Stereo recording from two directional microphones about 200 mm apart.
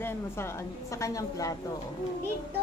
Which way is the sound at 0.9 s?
15° left (ahead or behind).